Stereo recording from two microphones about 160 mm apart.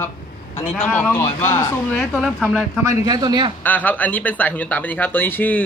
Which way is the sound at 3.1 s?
25° right (ahead or behind).